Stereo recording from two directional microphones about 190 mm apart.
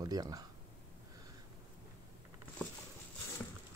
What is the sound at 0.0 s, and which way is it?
Speech, 20° right (ahead or behind).